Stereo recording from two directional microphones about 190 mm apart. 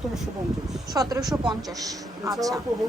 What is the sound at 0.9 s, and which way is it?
A woman's voice, 20° right (ahead or behind).